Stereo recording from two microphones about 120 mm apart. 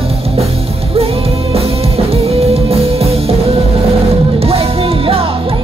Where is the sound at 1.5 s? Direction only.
55° right (ahead or behind).